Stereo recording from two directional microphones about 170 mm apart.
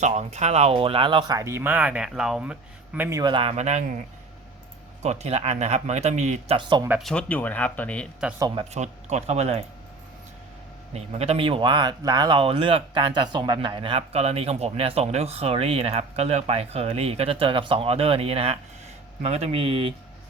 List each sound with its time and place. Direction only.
0.0 s speech: 40° right (ahead or behind)
3.5 s speech: 40° right (ahead or behind)
5.0 s speech: 40° right (ahead or behind)
6.6 s speech: 30° right (ahead or behind)
7.0 s speech: 5° left (ahead or behind)
8.4 s speech: 25° right (ahead or behind)
8.7 s speech: 40° right (ahead or behind)
10.9 s speech: 35° right (ahead or behind)